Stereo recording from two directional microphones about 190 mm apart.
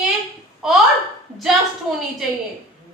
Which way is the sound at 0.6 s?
Centre (ahead or behind).